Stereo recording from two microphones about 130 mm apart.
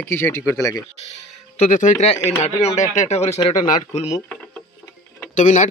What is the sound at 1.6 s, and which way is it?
Speech, 75° left (ahead or behind).